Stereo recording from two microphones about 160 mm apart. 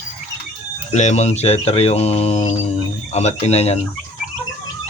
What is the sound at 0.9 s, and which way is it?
Speech, 45° left (ahead or behind).